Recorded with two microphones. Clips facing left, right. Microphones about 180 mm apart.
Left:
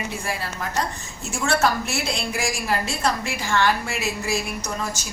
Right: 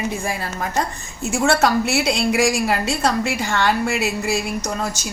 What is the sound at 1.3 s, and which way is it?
A woman's voice, 70° right (ahead or behind).